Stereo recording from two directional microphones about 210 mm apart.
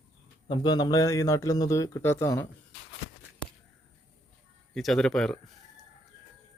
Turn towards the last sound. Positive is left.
turn(degrees=0)  # may be behind; listen again after turning